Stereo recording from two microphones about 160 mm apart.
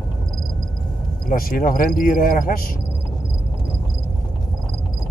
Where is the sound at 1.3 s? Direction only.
60° left (ahead or behind).